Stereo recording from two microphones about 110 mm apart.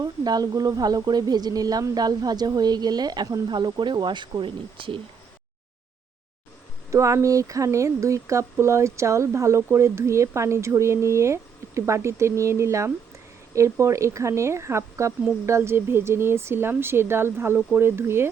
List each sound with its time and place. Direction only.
0.0 s speech: 35° right (ahead or behind); by 4.9 s 50° right (ahead or behind)
6.9 s speech: 30° right (ahead or behind)